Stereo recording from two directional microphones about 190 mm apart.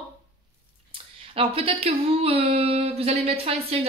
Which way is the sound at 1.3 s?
30° right (ahead or behind).